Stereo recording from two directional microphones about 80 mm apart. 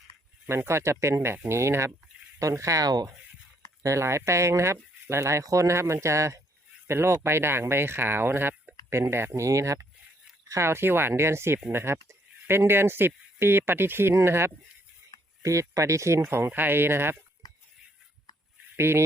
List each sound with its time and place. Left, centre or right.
0.4 s speech: right
3.8 s speech: right
18.8 s speech: right